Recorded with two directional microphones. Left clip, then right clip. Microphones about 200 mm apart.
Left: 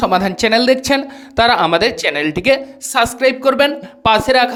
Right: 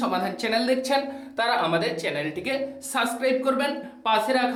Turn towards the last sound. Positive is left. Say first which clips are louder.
# left 10 dB
turn(degrees=50)  # may be behind; listen again after turning